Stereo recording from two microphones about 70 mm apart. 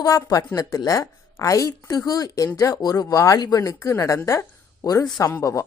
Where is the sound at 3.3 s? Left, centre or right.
Left.